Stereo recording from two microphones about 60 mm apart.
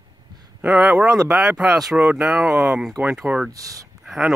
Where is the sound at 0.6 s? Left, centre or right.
Right.